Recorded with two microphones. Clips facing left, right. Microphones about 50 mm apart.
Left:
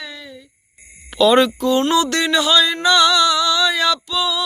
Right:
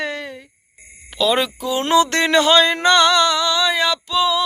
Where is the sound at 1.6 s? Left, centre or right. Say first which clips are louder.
Left 5 dB; centre.